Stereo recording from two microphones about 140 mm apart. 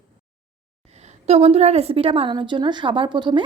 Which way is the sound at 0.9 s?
50° right (ahead or behind).